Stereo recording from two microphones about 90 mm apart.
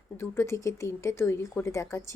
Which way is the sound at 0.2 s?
30° left (ahead or behind).